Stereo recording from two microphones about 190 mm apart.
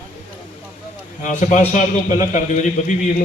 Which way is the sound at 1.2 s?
40° left (ahead or behind).